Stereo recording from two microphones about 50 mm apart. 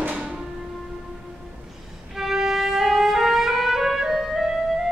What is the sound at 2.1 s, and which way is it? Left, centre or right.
Music, centre.